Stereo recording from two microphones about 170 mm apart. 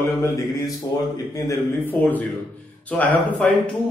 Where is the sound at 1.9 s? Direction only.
10° left (ahead or behind).